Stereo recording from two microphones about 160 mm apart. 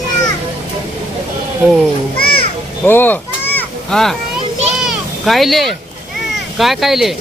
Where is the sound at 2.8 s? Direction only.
15° left (ahead or behind).